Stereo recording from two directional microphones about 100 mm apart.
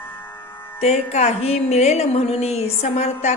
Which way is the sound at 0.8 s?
90° left.